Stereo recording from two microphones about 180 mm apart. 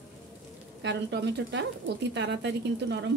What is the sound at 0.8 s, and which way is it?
A woman's voice, 70° right (ahead or behind).